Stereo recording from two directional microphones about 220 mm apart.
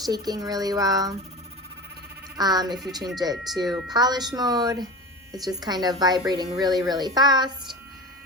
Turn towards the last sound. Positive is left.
turn(degrees=-20)  # may be behind; listen again after turning